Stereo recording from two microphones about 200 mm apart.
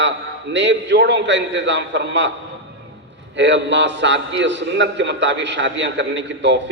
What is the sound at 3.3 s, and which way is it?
A man's voice, 65° right (ahead or behind).